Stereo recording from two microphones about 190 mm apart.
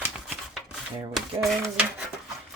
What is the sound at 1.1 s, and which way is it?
Speech, centre (ahead or behind).